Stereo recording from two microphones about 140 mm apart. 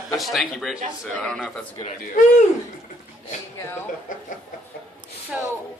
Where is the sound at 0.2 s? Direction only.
Centre (ahead or behind).